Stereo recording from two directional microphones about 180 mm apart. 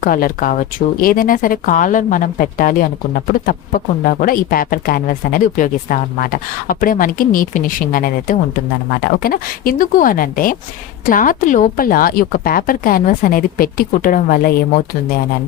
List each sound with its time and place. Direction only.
0.0 s speech: 50° left (ahead or behind)